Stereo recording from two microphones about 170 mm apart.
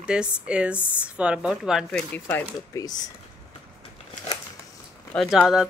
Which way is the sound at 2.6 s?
20° left (ahead or behind).